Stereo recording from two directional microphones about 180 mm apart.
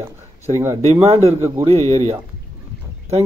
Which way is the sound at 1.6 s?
35° right (ahead or behind).